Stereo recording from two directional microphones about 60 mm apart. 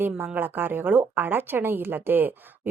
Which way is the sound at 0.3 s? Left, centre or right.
Right.